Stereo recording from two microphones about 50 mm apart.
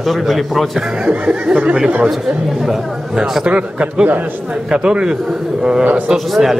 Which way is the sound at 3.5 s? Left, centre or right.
Right.